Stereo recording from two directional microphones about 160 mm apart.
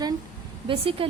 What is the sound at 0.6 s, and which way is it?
Speech, 35° right (ahead or behind).